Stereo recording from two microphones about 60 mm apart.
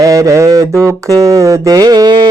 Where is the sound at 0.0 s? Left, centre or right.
Right.